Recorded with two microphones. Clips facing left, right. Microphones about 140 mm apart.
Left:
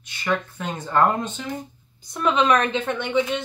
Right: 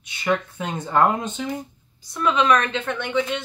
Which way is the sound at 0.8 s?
5° right (ahead or behind).